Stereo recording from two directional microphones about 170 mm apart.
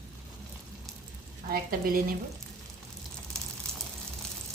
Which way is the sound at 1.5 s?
55° right (ahead or behind).